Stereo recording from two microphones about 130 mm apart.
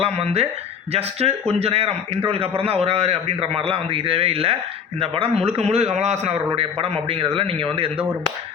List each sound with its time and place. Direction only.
0.0 s a man's voice: 50° right (ahead or behind)
6.6 s a man's voice: 50° right (ahead or behind)